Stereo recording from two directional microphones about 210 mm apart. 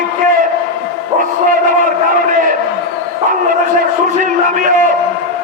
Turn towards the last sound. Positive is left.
turn(degrees=-40)  # may be behind; listen again after turning